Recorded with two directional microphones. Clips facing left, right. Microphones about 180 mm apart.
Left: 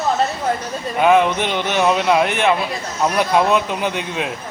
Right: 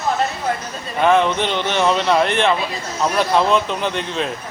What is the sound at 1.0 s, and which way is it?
A man's voice, 10° left (ahead or behind).